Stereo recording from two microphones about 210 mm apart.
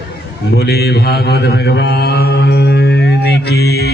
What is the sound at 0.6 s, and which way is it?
Mantra, 50° left (ahead or behind).